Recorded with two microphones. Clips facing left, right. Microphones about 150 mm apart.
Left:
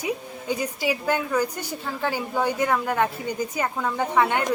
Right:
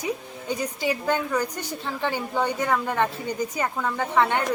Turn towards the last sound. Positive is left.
turn(degrees=15)  # may be behind; listen again after turning